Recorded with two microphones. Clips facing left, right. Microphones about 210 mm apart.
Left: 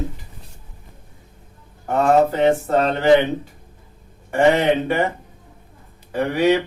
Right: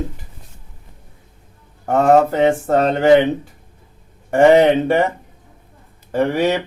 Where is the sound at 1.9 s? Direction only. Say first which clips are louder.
Right 3 dB; 45° right (ahead or behind).